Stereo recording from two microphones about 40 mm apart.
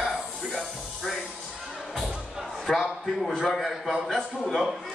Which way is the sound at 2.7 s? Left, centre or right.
Centre.